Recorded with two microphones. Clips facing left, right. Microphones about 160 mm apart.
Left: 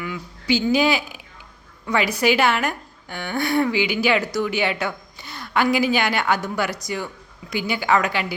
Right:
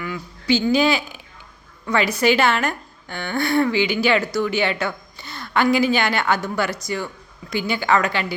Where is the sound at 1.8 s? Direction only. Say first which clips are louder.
Right 1 dB; 10° left (ahead or behind).